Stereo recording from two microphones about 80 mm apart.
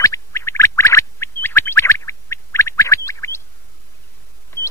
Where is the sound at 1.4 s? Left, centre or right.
Left.